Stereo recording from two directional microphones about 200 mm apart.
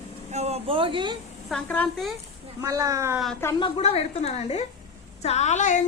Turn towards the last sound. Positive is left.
turn(degrees=35)  # may be behind; listen again after turning